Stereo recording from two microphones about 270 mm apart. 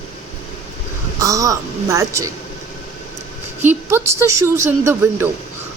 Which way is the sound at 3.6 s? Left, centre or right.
Centre.